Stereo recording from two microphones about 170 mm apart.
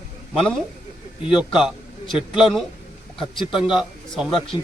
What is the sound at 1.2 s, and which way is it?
A man's voice, 5° right (ahead or behind).